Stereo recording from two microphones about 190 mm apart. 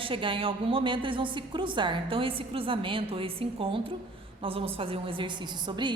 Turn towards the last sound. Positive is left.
turn(degrees=-25)  # may be behind; listen again after turning